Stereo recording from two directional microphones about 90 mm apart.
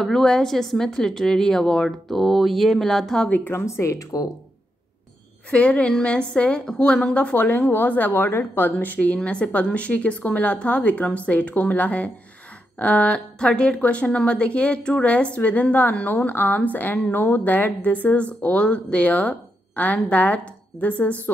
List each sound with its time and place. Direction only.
0.0 s a woman's voice: 5° left (ahead or behind)
3.3 s a woman's voice: 15° left (ahead or behind)
3.5 s speech: 30° left (ahead or behind)
5.5 s a woman's voice: 15° left (ahead or behind)